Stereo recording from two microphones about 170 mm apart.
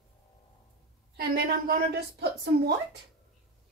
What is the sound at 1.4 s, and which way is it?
Speech, 60° right (ahead or behind).